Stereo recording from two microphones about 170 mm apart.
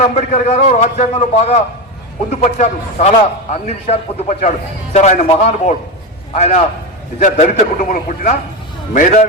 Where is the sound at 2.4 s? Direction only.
40° left (ahead or behind).